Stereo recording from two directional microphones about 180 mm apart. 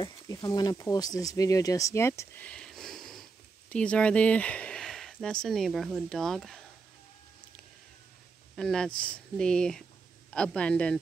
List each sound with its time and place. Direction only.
0.0 s speech: 20° left (ahead or behind); by 6.6 s centre (ahead or behind)
8.5 s speech: 5° left (ahead or behind)